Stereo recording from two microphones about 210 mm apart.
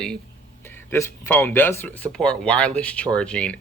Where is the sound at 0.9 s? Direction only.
10° left (ahead or behind).